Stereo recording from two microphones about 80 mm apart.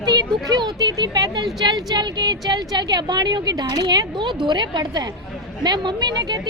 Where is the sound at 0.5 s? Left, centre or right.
Right.